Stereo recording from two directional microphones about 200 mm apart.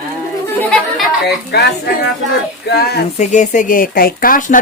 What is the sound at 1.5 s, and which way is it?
Speech, 55° left (ahead or behind).